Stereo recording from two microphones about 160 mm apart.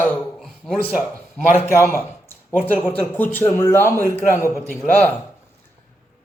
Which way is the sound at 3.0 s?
10° left (ahead or behind).